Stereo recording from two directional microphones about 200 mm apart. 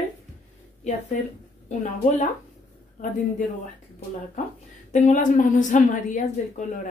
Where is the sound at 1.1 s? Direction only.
40° left (ahead or behind).